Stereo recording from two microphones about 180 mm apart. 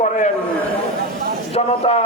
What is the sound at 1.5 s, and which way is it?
Music, 35° left (ahead or behind).